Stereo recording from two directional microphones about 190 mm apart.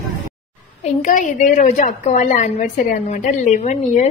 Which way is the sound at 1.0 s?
40° left (ahead or behind).